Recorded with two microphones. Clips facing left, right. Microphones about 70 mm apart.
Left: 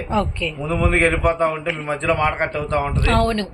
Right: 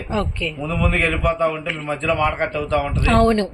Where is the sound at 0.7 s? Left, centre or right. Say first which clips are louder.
Left 3 dB; left.